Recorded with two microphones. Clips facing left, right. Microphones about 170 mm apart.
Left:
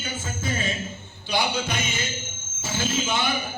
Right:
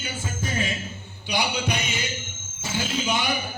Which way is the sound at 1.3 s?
15° right (ahead or behind).